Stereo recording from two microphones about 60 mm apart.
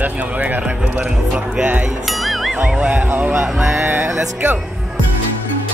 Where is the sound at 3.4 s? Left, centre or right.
Centre.